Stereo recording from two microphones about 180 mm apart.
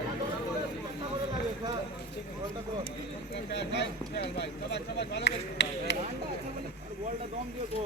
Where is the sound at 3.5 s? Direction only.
70° left (ahead or behind).